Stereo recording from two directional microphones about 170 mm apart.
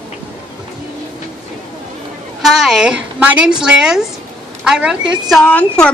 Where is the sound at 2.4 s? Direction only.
Centre (ahead or behind).